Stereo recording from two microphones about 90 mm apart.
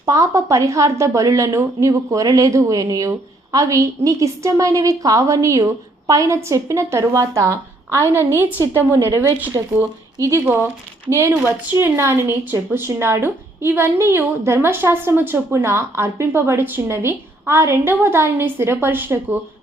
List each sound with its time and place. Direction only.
0.0 s a woman's voice: 35° right (ahead or behind)
10.2 s a woman's voice: 35° right (ahead or behind)
10.4 s speech: 20° right (ahead or behind)